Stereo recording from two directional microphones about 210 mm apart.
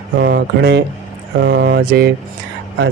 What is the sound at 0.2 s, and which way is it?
Speech, 50° right (ahead or behind).